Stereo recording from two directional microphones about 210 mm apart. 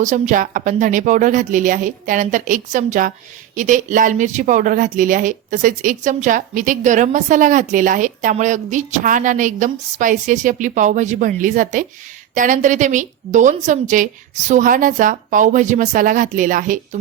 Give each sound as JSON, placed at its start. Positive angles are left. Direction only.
{"t": 0.0, "sound": "speech", "side_deg": -35}